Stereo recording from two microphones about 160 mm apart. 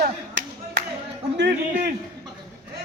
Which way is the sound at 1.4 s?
75° right (ahead or behind).